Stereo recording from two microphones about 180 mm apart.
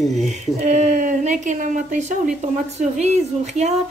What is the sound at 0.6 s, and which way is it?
A woman's voice, 45° right (ahead or behind).